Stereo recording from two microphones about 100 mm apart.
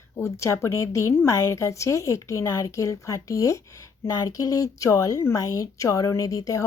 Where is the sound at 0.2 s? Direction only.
30° left (ahead or behind).